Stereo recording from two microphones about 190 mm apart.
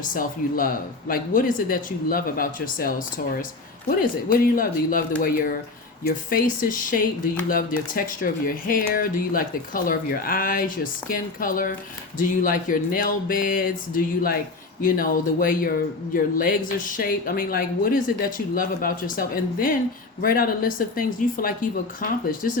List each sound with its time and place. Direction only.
0.0 s speech: 45° left (ahead or behind)